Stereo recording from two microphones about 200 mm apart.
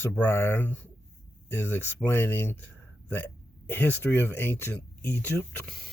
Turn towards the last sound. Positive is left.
turn(degrees=0)  # may be behind; listen again after turning